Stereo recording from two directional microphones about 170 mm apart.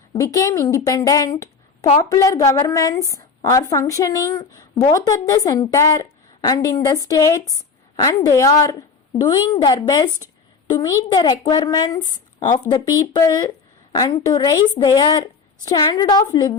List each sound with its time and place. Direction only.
0.1 s a woman's voice: 20° left (ahead or behind)